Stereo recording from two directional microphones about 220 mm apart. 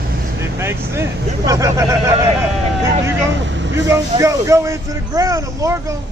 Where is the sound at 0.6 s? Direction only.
10° right (ahead or behind).